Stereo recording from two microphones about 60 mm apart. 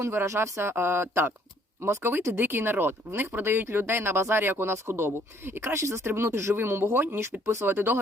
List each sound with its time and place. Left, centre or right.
0.0 s speech: right